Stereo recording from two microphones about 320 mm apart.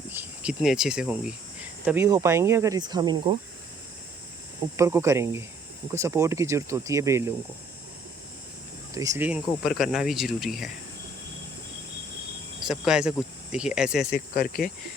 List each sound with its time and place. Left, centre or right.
0.1 s cricket: centre
1.8 s speech: centre
4.8 s speech: centre
9.0 s speech: centre
12.6 s speech: centre
14.1 s speech: left